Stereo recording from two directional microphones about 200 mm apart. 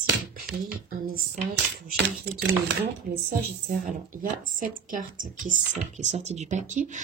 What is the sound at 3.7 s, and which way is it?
A woman's voice, 40° right (ahead or behind).